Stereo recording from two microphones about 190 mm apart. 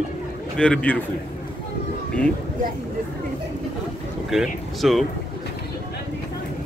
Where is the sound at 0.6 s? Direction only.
5° left (ahead or behind).